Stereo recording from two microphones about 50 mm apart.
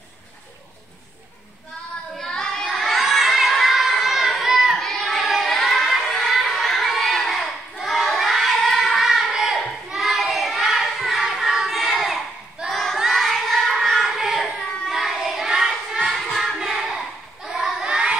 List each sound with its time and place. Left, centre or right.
2.1 s child singing: centre
4.7 s child singing: centre
9.8 s a sound: centre
10.6 s child singing: centre
13.1 s crowd: centre
14.9 s child singing: centre
17.8 s child singing: centre